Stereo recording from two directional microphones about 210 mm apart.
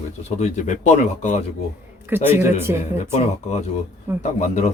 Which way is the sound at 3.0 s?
35° left (ahead or behind).